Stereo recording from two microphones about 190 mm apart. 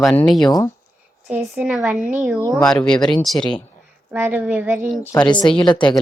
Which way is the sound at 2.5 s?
5° left (ahead or behind).